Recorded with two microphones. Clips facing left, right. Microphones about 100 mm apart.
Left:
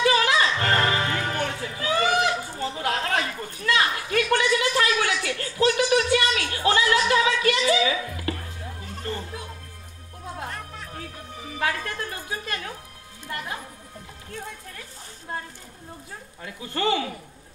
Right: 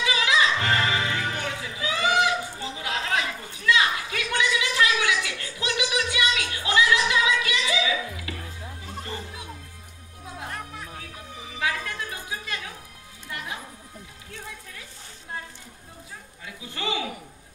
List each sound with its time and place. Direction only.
0.0 s music: 50° left (ahead or behind)
11.5 s music: 45° left (ahead or behind)
16.4 s speech: 50° left (ahead or behind)